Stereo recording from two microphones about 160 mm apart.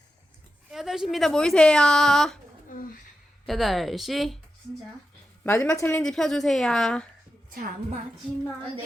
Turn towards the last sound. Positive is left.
turn(degrees=5)  # may be behind; listen again after turning